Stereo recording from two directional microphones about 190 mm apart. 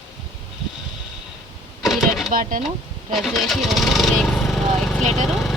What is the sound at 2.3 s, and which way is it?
Speech, 45° right (ahead or behind).